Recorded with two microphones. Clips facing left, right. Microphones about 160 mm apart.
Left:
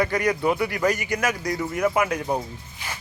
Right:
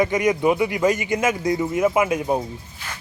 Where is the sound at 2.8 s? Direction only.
15° left (ahead or behind).